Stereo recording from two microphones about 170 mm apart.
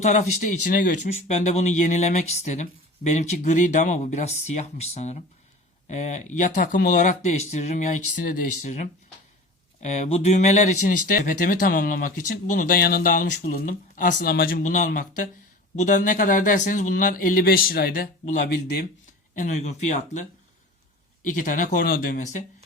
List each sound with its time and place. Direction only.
0.0 s speech: 45° left (ahead or behind)
1.1 s speech: 40° left (ahead or behind); by 18.9 s 65° left (ahead or behind)
19.4 s speech: 45° left (ahead or behind)
21.2 s speech: 50° left (ahead or behind)